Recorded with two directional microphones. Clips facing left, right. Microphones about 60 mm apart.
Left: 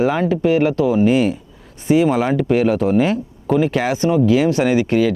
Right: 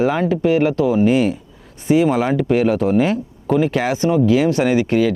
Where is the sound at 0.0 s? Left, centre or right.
Left.